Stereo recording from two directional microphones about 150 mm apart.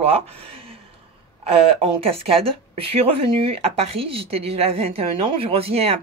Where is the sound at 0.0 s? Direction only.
40° right (ahead or behind).